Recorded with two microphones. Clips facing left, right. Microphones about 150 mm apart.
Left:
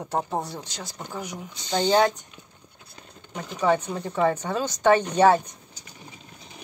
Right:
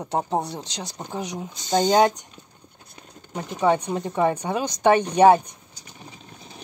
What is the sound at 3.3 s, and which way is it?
Speech, 20° right (ahead or behind).